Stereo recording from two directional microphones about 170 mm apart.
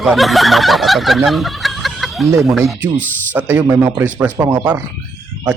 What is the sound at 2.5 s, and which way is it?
Fowl, 5° right (ahead or behind).